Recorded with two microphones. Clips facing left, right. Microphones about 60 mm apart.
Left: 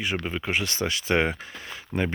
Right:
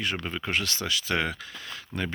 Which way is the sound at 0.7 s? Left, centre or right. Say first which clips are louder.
Left 3 dB; left.